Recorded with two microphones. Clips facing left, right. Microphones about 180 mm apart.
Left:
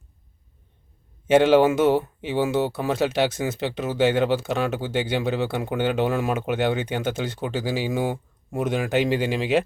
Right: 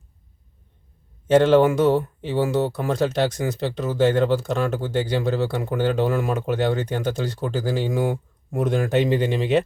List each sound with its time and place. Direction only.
1.3 s speech: 5° left (ahead or behind)